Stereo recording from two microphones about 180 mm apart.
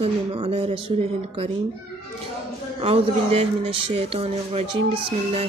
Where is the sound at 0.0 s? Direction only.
35° right (ahead or behind).